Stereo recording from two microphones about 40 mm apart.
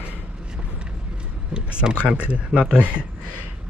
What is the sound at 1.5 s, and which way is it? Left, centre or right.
Speech, right.